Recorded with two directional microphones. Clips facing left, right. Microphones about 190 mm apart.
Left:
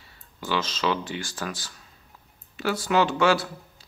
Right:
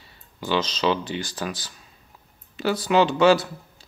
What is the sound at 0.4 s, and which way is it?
Speech, 20° right (ahead or behind).